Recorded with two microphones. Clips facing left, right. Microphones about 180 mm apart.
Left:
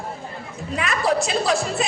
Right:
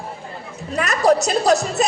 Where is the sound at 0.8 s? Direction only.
40° right (ahead or behind).